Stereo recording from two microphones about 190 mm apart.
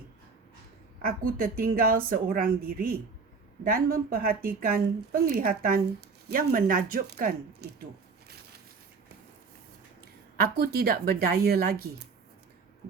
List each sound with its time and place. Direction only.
1.0 s speech: 50° right (ahead or behind)
10.4 s speech: 55° right (ahead or behind)